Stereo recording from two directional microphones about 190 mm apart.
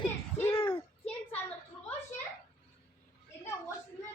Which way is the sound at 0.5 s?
25° left (ahead or behind).